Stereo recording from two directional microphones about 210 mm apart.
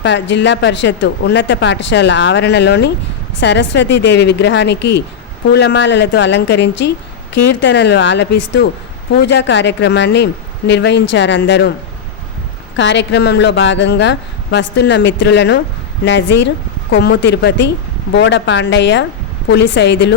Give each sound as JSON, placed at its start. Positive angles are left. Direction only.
{"t": 0.0, "sound": "speech", "side_deg": 55}
{"t": 12.7, "sound": "speech", "side_deg": 60}